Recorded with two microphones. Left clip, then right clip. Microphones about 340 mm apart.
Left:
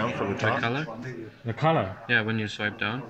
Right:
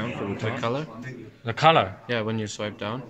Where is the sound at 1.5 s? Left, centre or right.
Right.